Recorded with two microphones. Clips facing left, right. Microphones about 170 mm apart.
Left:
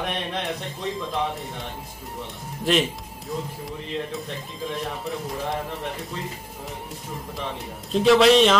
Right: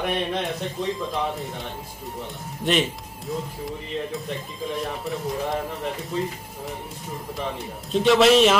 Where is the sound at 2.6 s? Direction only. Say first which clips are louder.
Left 1 dB; centre (ahead or behind).